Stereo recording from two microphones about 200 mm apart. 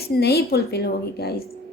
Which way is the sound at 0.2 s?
55° left (ahead or behind).